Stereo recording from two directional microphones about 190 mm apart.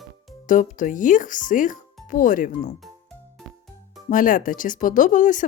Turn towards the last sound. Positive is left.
turn(degrees=40)  # may be behind; listen again after turning